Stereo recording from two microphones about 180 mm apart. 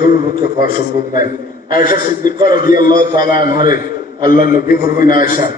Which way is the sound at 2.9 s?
25° right (ahead or behind).